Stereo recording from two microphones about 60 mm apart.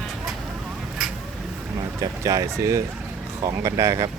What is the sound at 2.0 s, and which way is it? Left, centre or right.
Speech, right.